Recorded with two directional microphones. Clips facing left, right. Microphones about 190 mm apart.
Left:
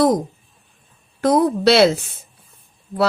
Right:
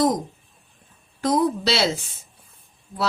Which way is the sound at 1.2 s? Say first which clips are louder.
Left 6 dB; 60° left (ahead or behind).